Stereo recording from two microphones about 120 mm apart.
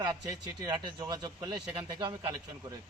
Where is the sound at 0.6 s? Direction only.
35° right (ahead or behind).